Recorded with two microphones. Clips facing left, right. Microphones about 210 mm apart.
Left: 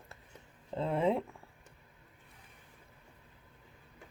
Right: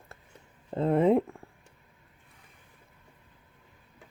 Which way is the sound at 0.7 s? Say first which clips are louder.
Right 8 dB; 55° right (ahead or behind).